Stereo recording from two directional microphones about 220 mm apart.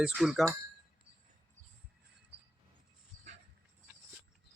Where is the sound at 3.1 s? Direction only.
35° right (ahead or behind).